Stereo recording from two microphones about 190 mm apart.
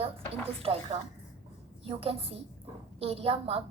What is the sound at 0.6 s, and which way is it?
A woman's voice, 30° right (ahead or behind).